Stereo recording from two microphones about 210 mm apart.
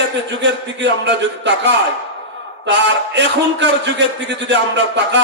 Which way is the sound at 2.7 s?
55° right (ahead or behind).